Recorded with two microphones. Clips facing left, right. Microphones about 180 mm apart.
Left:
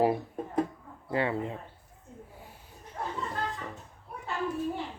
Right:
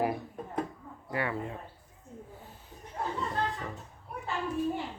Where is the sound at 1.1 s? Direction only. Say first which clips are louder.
Left 4 dB; 25° left (ahead or behind).